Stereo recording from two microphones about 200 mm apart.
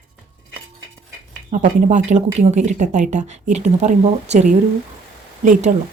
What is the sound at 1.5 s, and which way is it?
A woman's voice, 40° right (ahead or behind).